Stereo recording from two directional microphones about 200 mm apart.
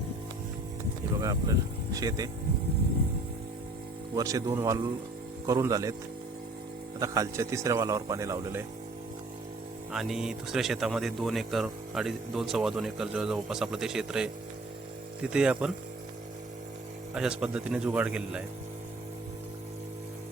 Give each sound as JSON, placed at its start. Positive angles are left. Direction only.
{"t": 1.2, "sound": "a man's voice", "side_deg": -15}
{"t": 4.1, "sound": "a man's voice", "side_deg": -15}
{"t": 7.0, "sound": "a man's voice", "side_deg": -15}
{"t": 9.9, "sound": "speech", "side_deg": 0}
{"t": 17.2, "sound": "speech", "side_deg": -5}